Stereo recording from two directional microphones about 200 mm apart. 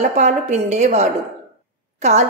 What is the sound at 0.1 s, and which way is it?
A woman's voice, 35° right (ahead or behind).